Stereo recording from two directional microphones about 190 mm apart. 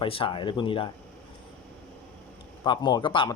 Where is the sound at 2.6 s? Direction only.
25° left (ahead or behind).